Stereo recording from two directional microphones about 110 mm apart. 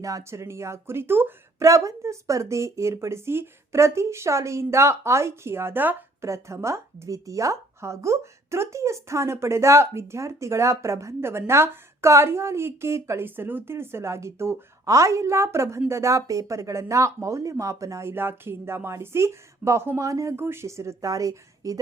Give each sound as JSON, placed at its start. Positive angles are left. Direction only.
{"t": 0.0, "sound": "a woman's voice", "side_deg": -30}